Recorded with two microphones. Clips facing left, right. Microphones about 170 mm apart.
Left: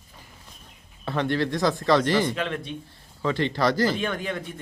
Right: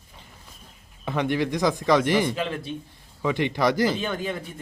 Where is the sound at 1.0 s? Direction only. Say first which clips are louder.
Even; 15° right (ahead or behind).